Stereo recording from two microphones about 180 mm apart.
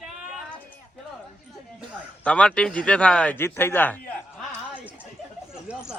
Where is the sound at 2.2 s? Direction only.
5° left (ahead or behind).